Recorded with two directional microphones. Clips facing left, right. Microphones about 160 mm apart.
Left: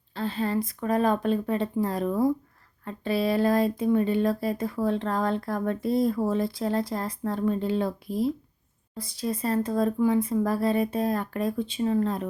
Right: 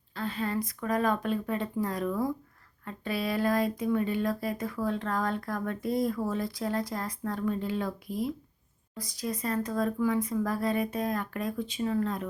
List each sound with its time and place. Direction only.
0.1 s speech: 30° left (ahead or behind)